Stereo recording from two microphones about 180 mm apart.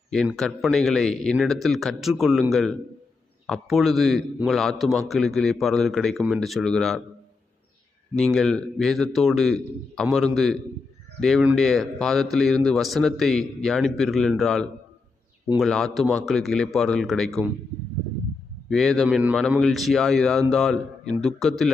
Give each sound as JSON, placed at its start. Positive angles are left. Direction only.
{"t": 0.3, "sound": "a man's voice", "side_deg": 0}
{"t": 8.1, "sound": "a man's voice", "side_deg": 5}
{"t": 18.7, "sound": "a man's voice", "side_deg": 0}